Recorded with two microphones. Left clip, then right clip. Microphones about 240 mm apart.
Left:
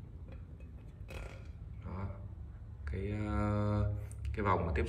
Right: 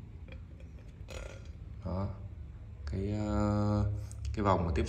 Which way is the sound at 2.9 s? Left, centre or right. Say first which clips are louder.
Right 3 dB; centre.